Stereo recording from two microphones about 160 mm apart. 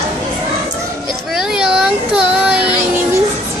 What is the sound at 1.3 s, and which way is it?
Speech, 5° right (ahead or behind).